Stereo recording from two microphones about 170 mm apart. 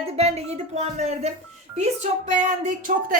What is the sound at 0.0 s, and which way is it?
A woman's voice, 35° right (ahead or behind).